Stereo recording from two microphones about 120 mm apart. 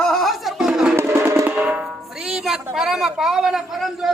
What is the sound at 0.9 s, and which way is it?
Music, 20° right (ahead or behind).